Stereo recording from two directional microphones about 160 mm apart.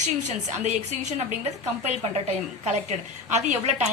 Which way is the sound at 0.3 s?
45° right (ahead or behind).